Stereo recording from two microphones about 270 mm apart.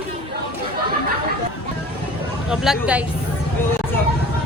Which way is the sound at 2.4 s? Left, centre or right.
Centre.